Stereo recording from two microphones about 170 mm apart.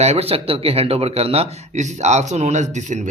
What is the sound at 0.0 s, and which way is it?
Speech, 35° right (ahead or behind).